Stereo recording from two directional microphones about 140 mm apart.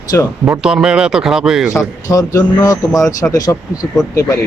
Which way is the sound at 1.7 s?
25° left (ahead or behind).